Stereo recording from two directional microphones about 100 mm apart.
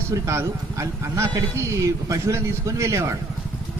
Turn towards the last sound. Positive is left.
turn(degrees=-30)  # may be behind; listen again after turning